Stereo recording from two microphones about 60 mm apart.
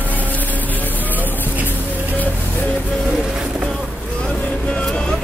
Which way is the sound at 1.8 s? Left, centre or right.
Right.